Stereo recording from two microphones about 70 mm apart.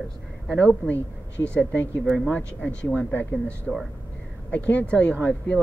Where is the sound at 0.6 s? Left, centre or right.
Centre.